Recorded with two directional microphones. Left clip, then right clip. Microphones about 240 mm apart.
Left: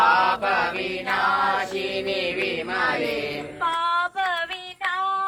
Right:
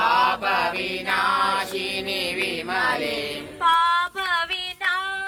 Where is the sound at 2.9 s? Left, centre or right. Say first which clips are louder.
Left 1 dB; right.